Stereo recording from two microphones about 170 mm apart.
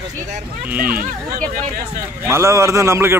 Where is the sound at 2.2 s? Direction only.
15° right (ahead or behind).